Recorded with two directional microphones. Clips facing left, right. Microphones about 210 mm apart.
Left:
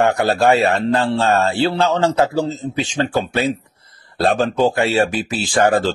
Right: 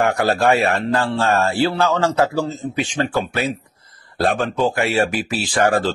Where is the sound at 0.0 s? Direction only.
25° left (ahead or behind).